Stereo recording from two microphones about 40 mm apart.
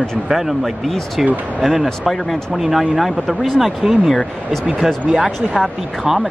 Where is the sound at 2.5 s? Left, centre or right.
Centre.